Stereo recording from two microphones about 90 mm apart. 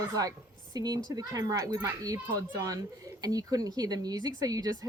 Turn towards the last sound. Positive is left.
turn(degrees=-45)  # may be behind; listen again after turning